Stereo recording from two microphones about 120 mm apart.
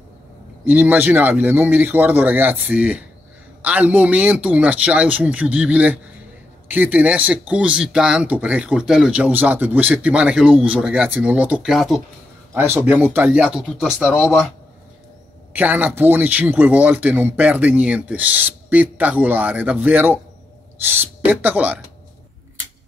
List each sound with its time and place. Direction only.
0.7 s speech: 15° right (ahead or behind)
12.5 s speech: 20° right (ahead or behind)
15.5 s speech: 15° right (ahead or behind)